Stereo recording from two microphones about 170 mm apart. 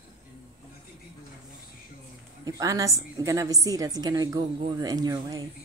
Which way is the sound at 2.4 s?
20° right (ahead or behind).